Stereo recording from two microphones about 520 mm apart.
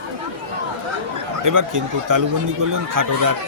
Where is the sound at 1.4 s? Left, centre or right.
Right.